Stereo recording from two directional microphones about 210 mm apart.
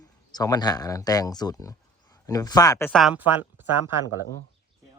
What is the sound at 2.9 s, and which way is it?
Speech, centre (ahead or behind).